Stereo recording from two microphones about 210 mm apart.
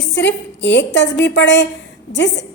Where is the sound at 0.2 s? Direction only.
55° left (ahead or behind).